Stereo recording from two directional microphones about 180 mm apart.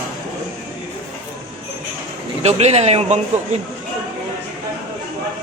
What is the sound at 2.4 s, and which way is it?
Speech, 35° right (ahead or behind).